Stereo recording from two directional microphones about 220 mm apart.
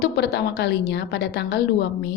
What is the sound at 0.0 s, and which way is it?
A woman's voice, 50° left (ahead or behind).